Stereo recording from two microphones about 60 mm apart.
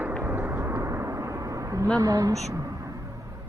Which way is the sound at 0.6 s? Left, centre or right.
Right.